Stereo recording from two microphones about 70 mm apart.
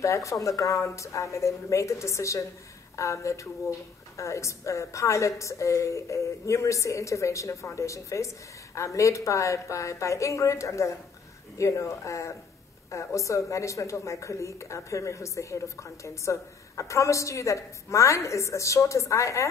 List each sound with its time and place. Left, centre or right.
0.0 s a woman's voice: left